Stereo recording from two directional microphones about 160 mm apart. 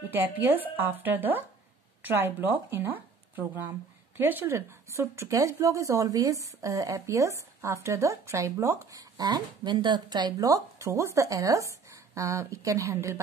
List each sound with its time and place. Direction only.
0.1 s a woman's voice: 10° right (ahead or behind)